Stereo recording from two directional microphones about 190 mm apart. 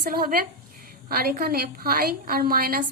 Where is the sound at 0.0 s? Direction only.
50° right (ahead or behind).